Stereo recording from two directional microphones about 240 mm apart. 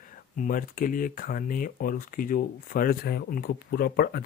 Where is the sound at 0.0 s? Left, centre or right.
Left.